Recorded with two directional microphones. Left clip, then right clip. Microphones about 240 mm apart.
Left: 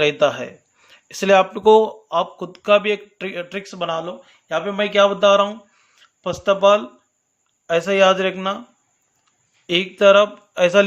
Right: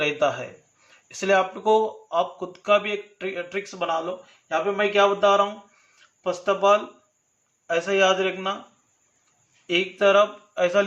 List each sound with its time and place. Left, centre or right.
0.0 s speech: left
9.6 s speech: left